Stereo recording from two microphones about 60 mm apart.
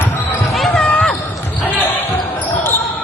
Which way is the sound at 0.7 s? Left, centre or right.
Centre.